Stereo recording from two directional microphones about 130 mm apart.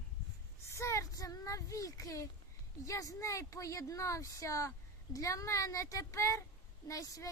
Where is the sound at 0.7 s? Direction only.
20° left (ahead or behind).